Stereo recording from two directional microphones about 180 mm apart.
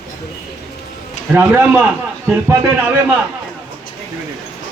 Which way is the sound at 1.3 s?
10° right (ahead or behind).